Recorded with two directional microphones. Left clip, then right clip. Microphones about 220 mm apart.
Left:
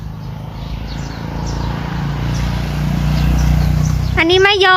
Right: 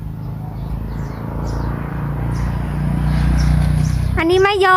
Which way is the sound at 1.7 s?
50° left (ahead or behind).